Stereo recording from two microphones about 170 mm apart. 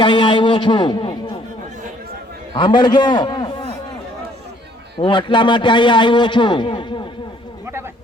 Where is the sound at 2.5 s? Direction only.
25° left (ahead or behind).